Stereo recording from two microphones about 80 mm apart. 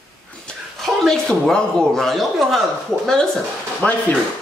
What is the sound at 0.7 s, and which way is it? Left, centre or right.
Speech, centre.